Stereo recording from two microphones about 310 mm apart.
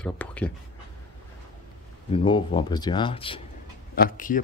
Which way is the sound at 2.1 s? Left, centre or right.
Centre.